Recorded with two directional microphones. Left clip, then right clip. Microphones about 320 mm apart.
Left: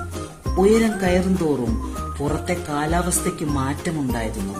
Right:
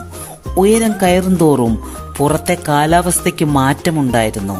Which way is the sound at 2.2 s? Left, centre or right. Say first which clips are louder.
Right 11 dB; right.